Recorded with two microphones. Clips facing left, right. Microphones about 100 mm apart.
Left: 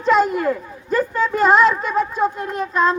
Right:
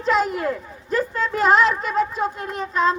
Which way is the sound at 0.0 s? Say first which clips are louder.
Left 4 dB; centre (ahead or behind).